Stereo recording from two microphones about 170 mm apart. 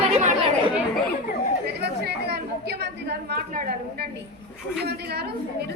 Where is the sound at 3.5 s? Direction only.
60° right (ahead or behind).